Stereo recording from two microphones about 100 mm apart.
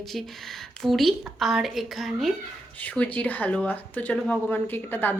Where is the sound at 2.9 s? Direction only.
15° left (ahead or behind).